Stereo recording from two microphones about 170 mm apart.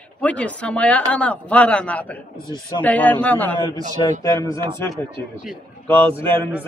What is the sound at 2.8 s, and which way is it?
A man's voice, 10° left (ahead or behind).